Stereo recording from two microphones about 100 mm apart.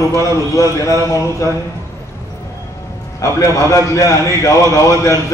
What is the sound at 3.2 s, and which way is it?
A man's voice, 30° left (ahead or behind).